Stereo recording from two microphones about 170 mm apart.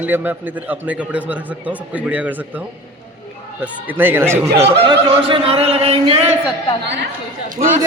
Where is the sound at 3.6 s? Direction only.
10° right (ahead or behind).